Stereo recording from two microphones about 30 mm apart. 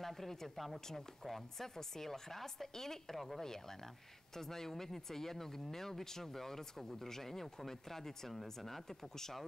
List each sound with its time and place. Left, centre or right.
0.0 s speech: centre
1.2 s speech: centre